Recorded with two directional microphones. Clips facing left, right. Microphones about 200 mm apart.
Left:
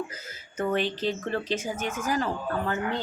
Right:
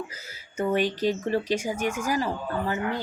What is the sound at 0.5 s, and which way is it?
A child's voice, 10° right (ahead or behind).